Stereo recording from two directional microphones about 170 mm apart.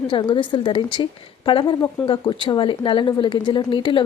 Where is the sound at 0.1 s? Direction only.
30° left (ahead or behind).